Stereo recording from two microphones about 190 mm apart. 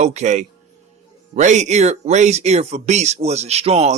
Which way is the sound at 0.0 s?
35° right (ahead or behind).